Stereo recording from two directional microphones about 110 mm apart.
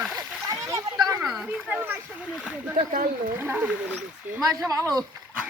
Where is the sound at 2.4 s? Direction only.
5° right (ahead or behind).